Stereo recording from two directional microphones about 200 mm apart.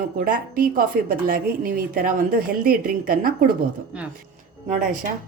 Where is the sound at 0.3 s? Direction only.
45° right (ahead or behind).